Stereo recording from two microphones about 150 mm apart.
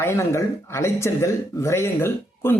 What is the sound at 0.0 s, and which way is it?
Speech, 20° left (ahead or behind).